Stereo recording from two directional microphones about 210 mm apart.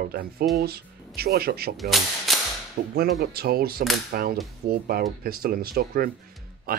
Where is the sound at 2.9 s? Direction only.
50° right (ahead or behind).